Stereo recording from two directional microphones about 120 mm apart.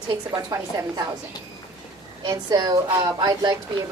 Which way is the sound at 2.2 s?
35° right (ahead or behind).